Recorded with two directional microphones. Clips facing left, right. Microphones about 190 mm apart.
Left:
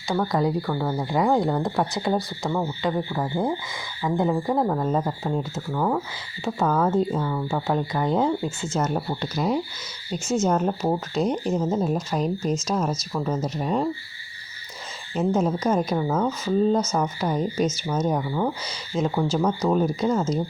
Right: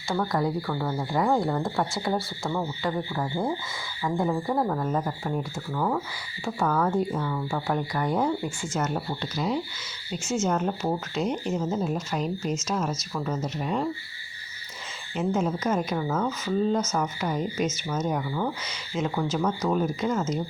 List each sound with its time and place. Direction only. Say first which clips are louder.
0.1 s speech: left 3 dB; 20° left (ahead or behind)
8.9 s speech: left 3 dB; 45° left (ahead or behind)
10.1 s speech: left 4 dB; 35° left (ahead or behind)
15.1 s speech: left 4 dB; 35° left (ahead or behind)